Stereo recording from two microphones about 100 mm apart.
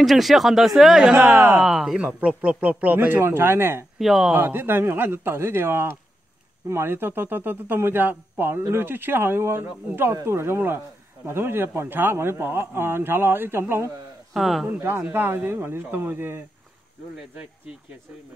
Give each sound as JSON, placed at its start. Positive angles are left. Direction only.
{"t": 0.0, "sound": "speech", "side_deg": 0}
{"t": 1.1, "sound": "speech", "side_deg": -20}
{"t": 1.6, "sound": "speech", "side_deg": -5}
{"t": 2.0, "sound": "speech", "side_deg": -15}
{"t": 4.0, "sound": "speech", "side_deg": 0}
{"t": 4.3, "sound": "speech", "side_deg": -20}
{"t": 14.3, "sound": "speech", "side_deg": 0}
{"t": 14.7, "sound": "speech", "side_deg": -20}